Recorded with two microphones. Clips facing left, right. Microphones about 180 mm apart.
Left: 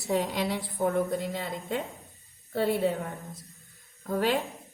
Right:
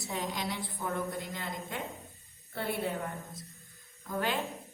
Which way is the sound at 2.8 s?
55° left (ahead or behind).